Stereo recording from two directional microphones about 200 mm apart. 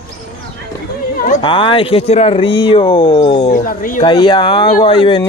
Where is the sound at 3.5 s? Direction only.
45° left (ahead or behind).